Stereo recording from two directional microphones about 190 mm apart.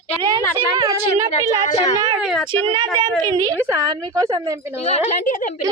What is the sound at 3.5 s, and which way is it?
A woman's voice, 15° right (ahead or behind).